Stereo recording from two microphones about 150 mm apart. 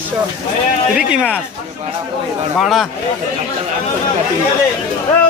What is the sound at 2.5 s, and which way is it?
Speech, centre (ahead or behind).